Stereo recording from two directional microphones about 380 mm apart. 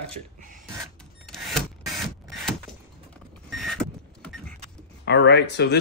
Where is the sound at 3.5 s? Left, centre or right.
Centre.